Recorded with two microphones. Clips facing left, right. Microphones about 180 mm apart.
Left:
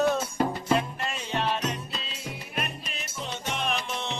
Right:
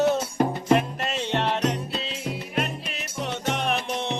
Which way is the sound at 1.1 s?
70° right (ahead or behind).